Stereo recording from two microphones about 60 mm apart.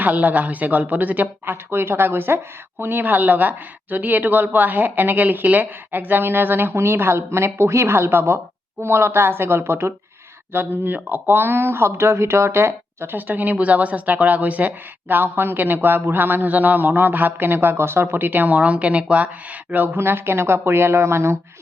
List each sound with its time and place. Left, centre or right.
0.0 s speech: right
1.7 s a woman's voice: right
10.5 s speech: right
13.1 s a woman's voice: right
20.0 s speech: right